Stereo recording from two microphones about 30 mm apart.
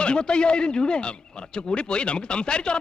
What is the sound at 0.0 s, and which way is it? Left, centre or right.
A man's voice, left.